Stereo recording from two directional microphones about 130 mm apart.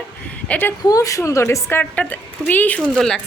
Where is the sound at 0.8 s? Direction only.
25° left (ahead or behind); by 3.2 s 5° left (ahead or behind).